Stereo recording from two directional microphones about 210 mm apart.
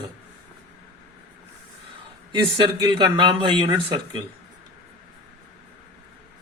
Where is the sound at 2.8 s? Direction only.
20° right (ahead or behind).